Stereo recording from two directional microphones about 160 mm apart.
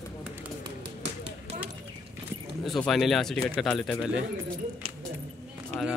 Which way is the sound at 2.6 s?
Centre (ahead or behind).